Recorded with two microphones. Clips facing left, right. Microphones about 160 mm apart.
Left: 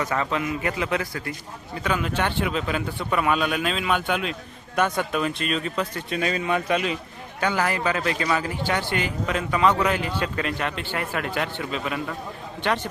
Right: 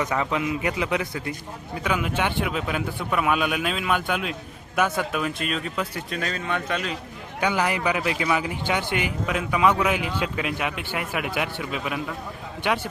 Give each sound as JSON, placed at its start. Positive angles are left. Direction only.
{"t": 0.1, "sound": "speech", "side_deg": -15}
{"t": 6.1, "sound": "a man's voice", "side_deg": 10}
{"t": 7.3, "sound": "speech", "side_deg": -15}